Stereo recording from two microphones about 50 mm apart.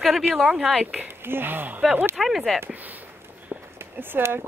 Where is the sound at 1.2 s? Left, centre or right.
Right.